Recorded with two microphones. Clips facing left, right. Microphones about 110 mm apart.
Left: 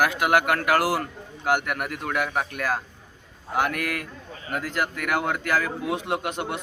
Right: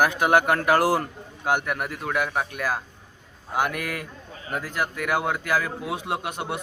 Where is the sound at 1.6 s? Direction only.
Centre (ahead or behind).